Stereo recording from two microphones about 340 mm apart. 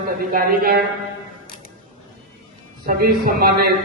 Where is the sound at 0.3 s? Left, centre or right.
Right.